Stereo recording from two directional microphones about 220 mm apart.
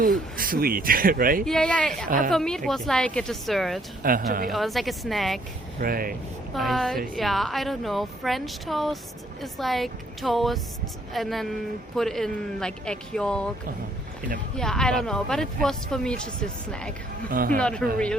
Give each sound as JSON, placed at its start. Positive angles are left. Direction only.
{"t": 0.3, "sound": "speech", "side_deg": -40}
{"t": 1.5, "sound": "a woman's voice", "side_deg": 5}
{"t": 2.0, "sound": "speech", "side_deg": -40}
{"t": 2.3, "sound": "a woman's voice", "side_deg": 0}
{"t": 4.0, "sound": "speech", "side_deg": -40}
{"t": 4.5, "sound": "a woman's voice", "side_deg": 0}
{"t": 5.8, "sound": "speech", "side_deg": -40}
{"t": 6.5, "sound": "a woman's voice", "side_deg": 0}
{"t": 14.5, "sound": "a woman's voice", "side_deg": 0}
{"t": 17.2, "sound": "speech", "side_deg": -40}
{"t": 17.6, "sound": "a woman's voice", "side_deg": 5}